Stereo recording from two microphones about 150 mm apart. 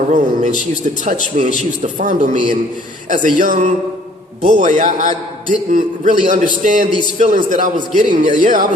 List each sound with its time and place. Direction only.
0.1 s a man's voice: 55° right (ahead or behind)